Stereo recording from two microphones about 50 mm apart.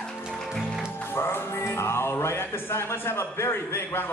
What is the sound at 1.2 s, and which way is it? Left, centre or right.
Speech, left.